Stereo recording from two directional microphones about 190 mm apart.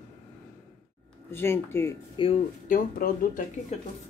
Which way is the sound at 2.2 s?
25° left (ahead or behind).